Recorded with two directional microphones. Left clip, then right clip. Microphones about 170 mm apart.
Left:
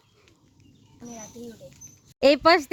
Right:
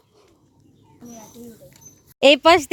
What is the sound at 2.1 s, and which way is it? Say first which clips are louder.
Speech: right 5 dB; 15° right (ahead or behind).